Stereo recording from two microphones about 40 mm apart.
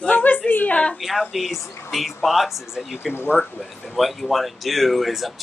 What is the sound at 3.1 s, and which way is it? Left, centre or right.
Speech, left.